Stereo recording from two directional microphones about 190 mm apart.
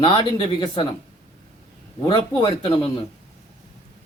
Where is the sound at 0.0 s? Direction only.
25° left (ahead or behind).